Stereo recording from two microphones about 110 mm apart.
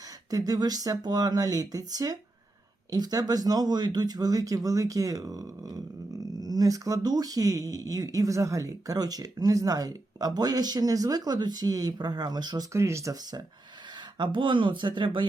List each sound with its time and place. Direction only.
0.3 s speech: 35° right (ahead or behind)
12.7 s speech: 25° right (ahead or behind)
14.2 s speech: 45° right (ahead or behind)